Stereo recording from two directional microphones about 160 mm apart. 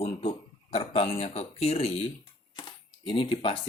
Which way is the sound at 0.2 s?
40° left (ahead or behind).